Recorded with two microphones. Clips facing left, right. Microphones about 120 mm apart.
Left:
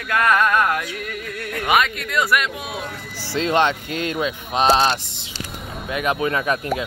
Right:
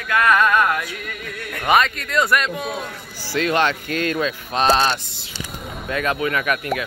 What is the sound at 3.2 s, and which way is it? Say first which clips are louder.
Speech: left 1 dB; 25° left (ahead or behind).